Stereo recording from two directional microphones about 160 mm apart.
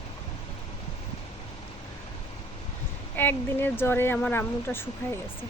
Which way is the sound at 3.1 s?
10° left (ahead or behind).